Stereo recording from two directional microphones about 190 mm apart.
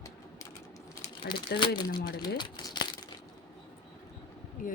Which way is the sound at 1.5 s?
25° left (ahead or behind).